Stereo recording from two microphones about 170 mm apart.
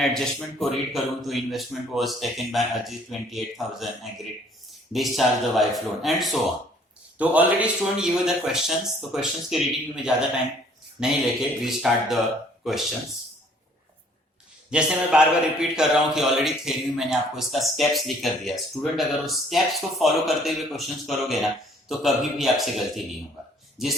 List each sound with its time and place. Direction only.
0.0 s a man's voice: centre (ahead or behind)
4.9 s a man's voice: centre (ahead or behind)
14.7 s a man's voice: 5° right (ahead or behind)